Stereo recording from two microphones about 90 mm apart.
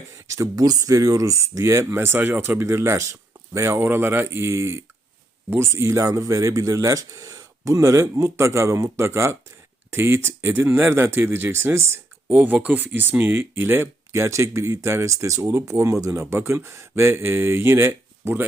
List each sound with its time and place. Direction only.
0.3 s speech: 35° right (ahead or behind)